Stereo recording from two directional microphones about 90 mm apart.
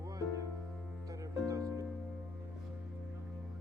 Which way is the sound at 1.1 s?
40° right (ahead or behind).